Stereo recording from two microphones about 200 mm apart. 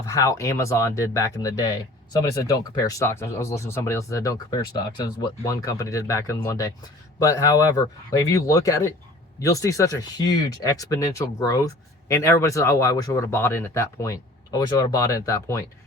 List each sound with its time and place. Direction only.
0.1 s speech: 15° left (ahead or behind)